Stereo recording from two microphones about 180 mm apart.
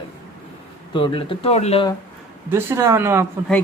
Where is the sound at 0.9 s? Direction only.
30° left (ahead or behind).